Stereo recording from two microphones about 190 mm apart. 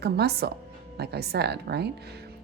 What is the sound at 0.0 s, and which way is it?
A woman's voice, 55° right (ahead or behind).